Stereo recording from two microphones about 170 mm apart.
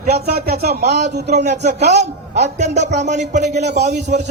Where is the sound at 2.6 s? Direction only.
45° right (ahead or behind).